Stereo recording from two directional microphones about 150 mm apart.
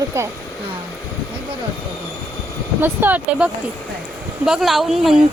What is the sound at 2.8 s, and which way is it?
Speech, 15° right (ahead or behind).